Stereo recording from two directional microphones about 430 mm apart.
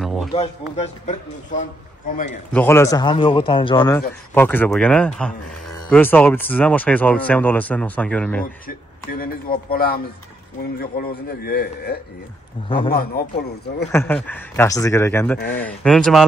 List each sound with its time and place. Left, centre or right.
0.0 s a sound: centre
0.3 s a man's voice: centre
2.5 s a man's voice: centre
9.2 s a man's voice: centre
13.9 s speech: centre